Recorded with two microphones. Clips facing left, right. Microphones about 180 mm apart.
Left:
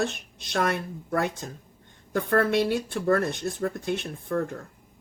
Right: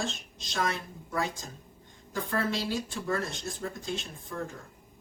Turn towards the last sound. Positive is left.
turn(degrees=60)  # may be behind; listen again after turning